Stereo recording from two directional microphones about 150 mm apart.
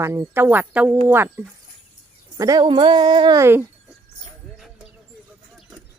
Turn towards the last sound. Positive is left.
turn(degrees=0)  # may be behind; listen again after turning